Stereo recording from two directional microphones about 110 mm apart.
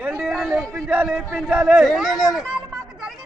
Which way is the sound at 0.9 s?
15° right (ahead or behind).